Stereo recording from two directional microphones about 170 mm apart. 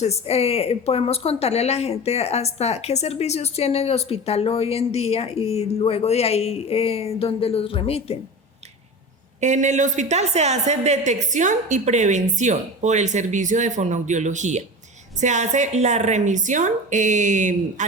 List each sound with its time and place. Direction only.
0.0 s a woman's voice: 40° left (ahead or behind)
9.4 s a woman's voice: 45° right (ahead or behind)